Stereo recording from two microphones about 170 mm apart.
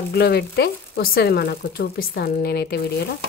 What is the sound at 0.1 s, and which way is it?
Speech, 70° left (ahead or behind).